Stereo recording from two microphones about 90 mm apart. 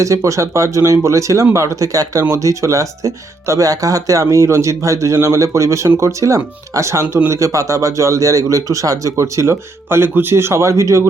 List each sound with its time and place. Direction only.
0.0 s a man's voice: 35° right (ahead or behind)